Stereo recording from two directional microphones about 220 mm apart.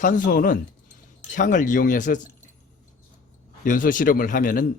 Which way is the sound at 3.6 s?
35° left (ahead or behind).